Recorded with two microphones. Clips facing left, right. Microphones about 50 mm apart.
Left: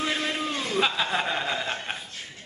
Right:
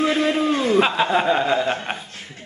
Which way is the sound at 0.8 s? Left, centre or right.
Right.